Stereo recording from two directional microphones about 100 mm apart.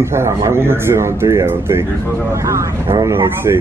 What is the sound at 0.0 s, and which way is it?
Speech, 25° right (ahead or behind).